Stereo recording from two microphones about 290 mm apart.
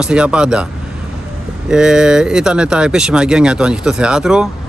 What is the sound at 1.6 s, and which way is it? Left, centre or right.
Speech, centre.